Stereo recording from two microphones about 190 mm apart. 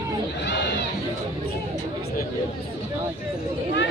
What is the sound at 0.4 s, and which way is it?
Crowd, 65° left (ahead or behind).